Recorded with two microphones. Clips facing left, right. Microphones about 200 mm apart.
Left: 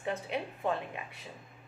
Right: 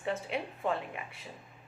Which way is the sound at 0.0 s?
15° left (ahead or behind).